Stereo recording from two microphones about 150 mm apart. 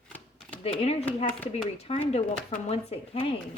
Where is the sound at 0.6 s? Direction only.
40° left (ahead or behind).